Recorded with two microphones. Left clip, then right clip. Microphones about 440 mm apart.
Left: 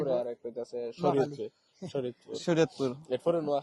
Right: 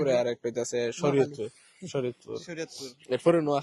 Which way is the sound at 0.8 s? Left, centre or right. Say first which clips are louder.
Right 2 dB; right.